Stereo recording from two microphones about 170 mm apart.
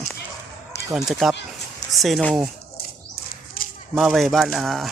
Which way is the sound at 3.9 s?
Centre (ahead or behind).